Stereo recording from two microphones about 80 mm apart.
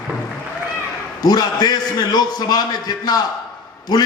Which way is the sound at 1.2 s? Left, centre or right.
Left.